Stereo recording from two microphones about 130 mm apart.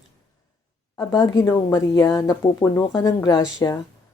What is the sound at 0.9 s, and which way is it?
Speech, 25° left (ahead or behind).